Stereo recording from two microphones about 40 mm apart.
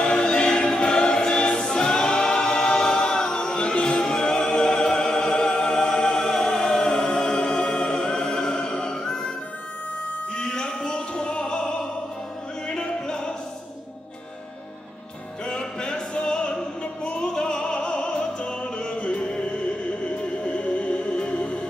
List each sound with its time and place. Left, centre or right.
0.0 s choir: left
10.3 s music: left
15.4 s music: centre